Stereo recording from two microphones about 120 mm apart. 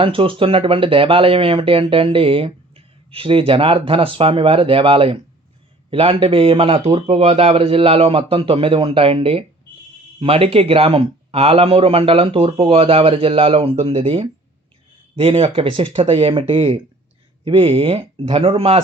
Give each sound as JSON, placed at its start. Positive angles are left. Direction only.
{"t": 0.0, "sound": "speech", "side_deg": -45}